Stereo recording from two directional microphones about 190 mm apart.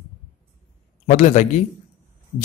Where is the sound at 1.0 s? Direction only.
40° left (ahead or behind).